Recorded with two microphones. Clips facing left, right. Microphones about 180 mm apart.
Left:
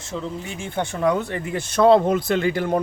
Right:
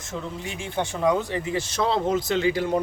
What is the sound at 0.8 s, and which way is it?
Speech, 60° left (ahead or behind).